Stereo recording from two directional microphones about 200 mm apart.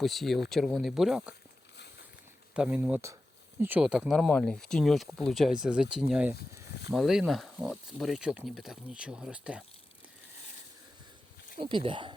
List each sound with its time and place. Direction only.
0.0 s speech: centre (ahead or behind)
2.6 s speech: 10° right (ahead or behind)
11.5 s speech: 25° right (ahead or behind)